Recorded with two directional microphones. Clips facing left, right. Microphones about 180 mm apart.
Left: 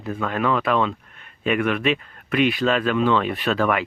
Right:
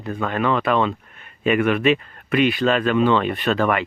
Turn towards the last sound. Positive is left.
turn(degrees=0)  # may be behind; listen again after turning